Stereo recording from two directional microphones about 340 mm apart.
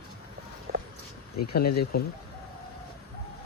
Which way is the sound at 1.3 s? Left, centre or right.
Left.